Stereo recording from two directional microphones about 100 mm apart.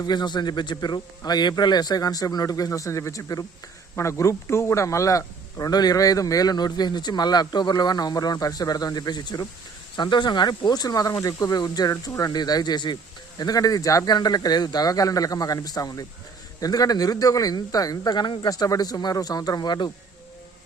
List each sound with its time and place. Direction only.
0.0 s a man's voice: 45° left (ahead or behind)